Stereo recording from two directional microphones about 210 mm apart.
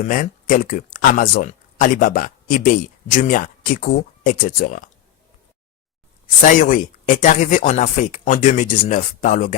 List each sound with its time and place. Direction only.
0.0 s speech: 40° left (ahead or behind)
6.4 s speech: 40° left (ahead or behind)